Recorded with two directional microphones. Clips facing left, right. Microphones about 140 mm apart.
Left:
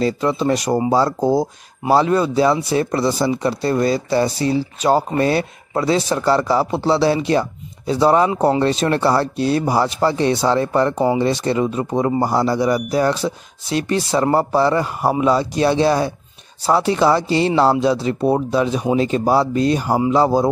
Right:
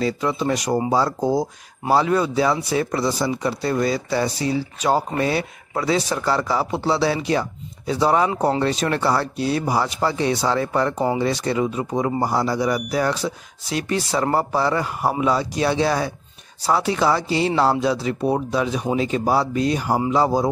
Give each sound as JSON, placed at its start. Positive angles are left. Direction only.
{"t": 0.0, "sound": "speech", "side_deg": 30}
{"t": 5.7, "sound": "speech", "side_deg": 30}